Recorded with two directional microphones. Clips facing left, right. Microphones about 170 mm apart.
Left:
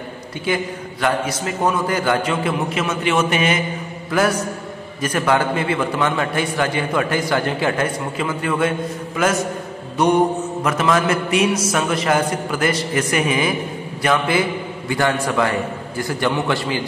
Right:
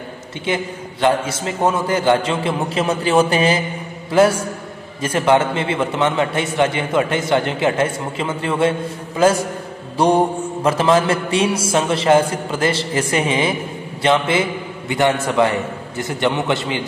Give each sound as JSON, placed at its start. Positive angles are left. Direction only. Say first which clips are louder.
{"t": 0.5, "sound": "a man's voice", "louder": "even", "side_deg": -25}
{"t": 9.9, "sound": "mantra", "louder": "right 1 dB", "side_deg": -30}
{"t": 10.6, "sound": "a man's voice", "louder": "right 4 dB", "side_deg": -30}